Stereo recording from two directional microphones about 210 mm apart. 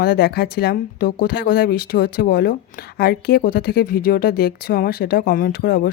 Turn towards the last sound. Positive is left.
turn(degrees=45)  # may be behind; listen again after turning